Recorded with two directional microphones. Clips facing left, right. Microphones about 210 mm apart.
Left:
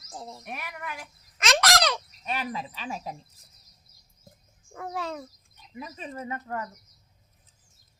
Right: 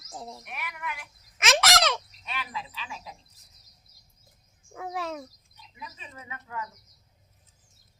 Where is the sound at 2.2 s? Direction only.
45° left (ahead or behind).